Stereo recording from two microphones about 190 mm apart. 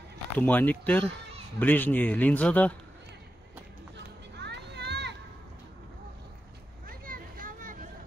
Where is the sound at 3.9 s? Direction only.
65° right (ahead or behind).